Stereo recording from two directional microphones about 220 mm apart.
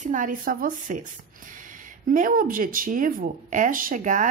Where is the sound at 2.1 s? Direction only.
40° right (ahead or behind).